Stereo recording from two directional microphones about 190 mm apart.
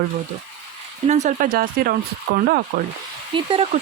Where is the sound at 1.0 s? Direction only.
40° right (ahead or behind).